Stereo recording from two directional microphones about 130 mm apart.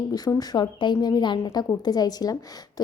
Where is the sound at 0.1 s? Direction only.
30° left (ahead or behind).